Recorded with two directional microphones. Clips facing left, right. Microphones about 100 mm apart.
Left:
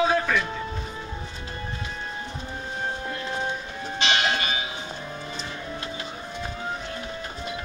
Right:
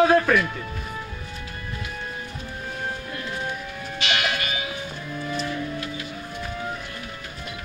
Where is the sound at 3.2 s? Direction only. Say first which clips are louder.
Even; 25° left (ahead or behind).